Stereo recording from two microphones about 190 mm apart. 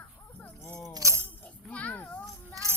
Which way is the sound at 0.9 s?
15° right (ahead or behind).